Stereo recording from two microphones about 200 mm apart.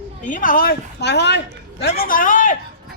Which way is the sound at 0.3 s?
40° left (ahead or behind).